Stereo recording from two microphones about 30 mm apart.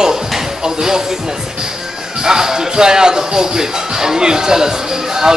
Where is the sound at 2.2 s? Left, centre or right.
Centre.